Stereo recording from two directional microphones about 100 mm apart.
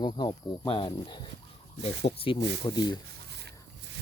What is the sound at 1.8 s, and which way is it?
Speech, 70° left (ahead or behind).